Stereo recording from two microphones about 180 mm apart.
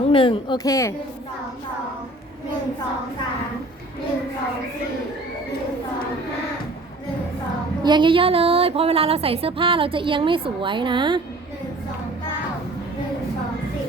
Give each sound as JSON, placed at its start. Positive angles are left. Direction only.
{"t": 0.1, "sound": "speech", "side_deg": 30}
{"t": 7.9, "sound": "a woman's voice", "side_deg": -25}